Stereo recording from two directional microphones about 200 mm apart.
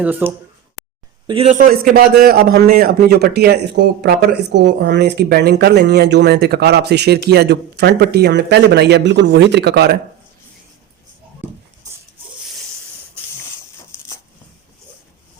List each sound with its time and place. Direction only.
0.0 s speech: 10° right (ahead or behind)
0.8 s a sound: centre (ahead or behind)
1.3 s speech: 30° right (ahead or behind)
1.5 s a man's voice: 45° right (ahead or behind)